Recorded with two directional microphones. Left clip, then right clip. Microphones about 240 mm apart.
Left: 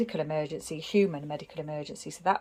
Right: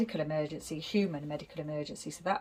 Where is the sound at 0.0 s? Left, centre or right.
Centre.